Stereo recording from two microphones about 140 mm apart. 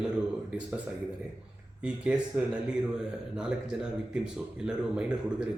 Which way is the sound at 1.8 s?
10° right (ahead or behind).